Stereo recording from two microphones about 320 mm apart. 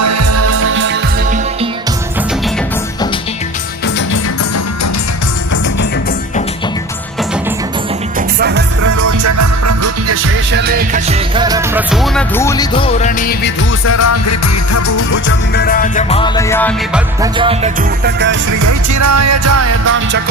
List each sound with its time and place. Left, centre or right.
0.0 s music: right
8.4 s music: right
9.0 s music: right
10.5 s music: right; by 13.5 s left
13.8 s music: left
15.1 s music: left; by 17.0 s centre
17.2 s music: centre
18.0 s music: right
18.6 s music: right